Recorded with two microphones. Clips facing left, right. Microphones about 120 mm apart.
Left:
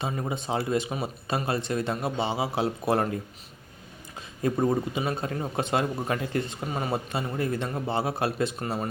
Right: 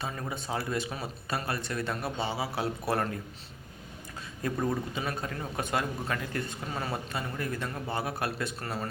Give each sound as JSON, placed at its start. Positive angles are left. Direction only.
{"t": 0.0, "sound": "speech", "side_deg": 20}
{"t": 4.4, "sound": "speech", "side_deg": 25}